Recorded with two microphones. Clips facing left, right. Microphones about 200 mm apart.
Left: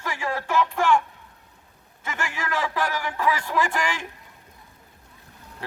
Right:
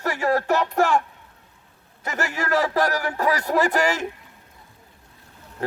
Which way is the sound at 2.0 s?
40° right (ahead or behind).